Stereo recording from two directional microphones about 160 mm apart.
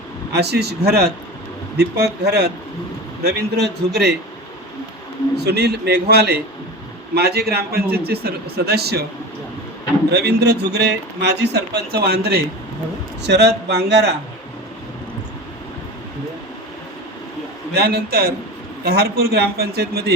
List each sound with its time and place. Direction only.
0.3 s speech: 90° right
5.4 s a man's voice: 90° right
10.1 s speech: 90° right
17.7 s a man's voice: 80° right